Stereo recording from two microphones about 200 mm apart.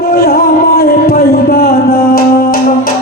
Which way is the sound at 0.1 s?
50° left (ahead or behind).